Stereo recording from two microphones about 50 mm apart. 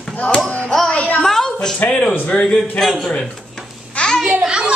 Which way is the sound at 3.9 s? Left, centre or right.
Centre.